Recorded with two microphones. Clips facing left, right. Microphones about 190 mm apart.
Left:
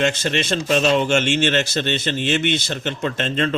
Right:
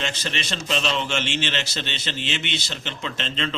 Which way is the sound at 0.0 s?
50° left (ahead or behind).